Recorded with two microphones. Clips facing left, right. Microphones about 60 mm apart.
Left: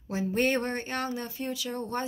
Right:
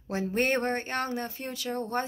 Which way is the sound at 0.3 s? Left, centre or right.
Right.